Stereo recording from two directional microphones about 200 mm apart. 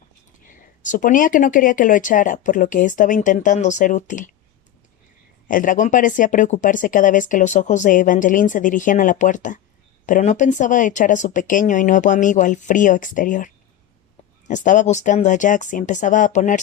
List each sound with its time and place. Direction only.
0.8 s speech: 40° left (ahead or behind)
5.5 s speech: 40° left (ahead or behind)